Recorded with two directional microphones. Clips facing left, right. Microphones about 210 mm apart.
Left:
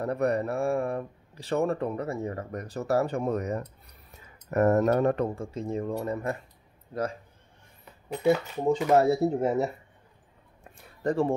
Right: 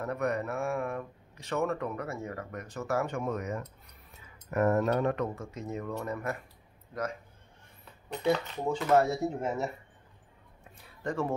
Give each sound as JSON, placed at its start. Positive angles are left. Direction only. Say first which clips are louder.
{"t": 0.0, "sound": "a man's voice", "louder": "left 5 dB", "side_deg": 35}
{"t": 8.1, "sound": "speech", "louder": "left 4 dB", "side_deg": 10}
{"t": 8.9, "sound": "speech", "louder": "left 3 dB", "side_deg": 35}
{"t": 11.1, "sound": "speech", "louder": "left 6 dB", "side_deg": 30}